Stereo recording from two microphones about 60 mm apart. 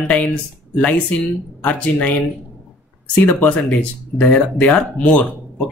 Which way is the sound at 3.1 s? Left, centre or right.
Left.